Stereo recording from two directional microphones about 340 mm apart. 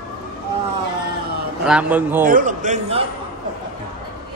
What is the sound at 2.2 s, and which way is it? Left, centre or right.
Speech, right.